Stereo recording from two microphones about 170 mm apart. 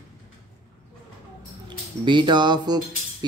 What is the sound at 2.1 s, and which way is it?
Speech, 25° right (ahead or behind).